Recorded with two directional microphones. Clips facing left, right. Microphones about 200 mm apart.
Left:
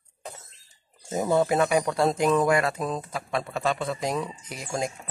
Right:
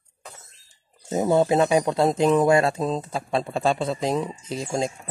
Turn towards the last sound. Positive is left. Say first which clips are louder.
# right 4 dB
turn(degrees=-25)  # may be behind; listen again after turning